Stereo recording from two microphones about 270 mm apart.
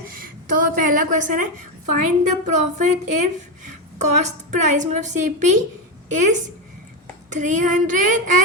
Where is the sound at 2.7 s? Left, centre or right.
Right.